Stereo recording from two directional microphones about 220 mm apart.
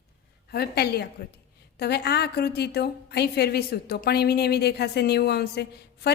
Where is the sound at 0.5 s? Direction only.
45° left (ahead or behind).